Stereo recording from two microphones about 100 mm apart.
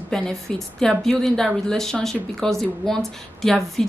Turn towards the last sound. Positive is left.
turn(degrees=5)  # may be behind; listen again after turning